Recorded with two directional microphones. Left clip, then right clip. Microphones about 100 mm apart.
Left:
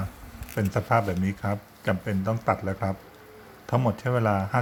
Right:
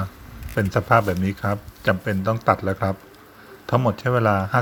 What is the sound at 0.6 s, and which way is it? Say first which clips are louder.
Speech: right 6 dB; 30° right (ahead or behind).